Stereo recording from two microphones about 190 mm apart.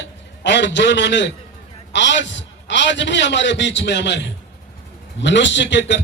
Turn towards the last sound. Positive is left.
turn(degrees=70)  # may be behind; listen again after turning